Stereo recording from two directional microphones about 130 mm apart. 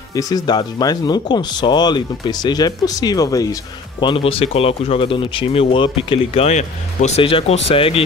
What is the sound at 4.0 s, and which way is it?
Speech, 40° left (ahead or behind).